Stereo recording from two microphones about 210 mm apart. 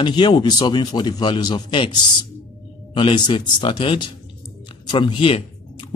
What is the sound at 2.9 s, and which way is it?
Speech, 25° left (ahead or behind).